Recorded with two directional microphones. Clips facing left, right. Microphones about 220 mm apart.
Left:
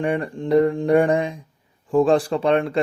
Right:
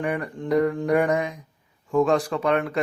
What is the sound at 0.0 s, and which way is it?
A man's voice, 25° left (ahead or behind).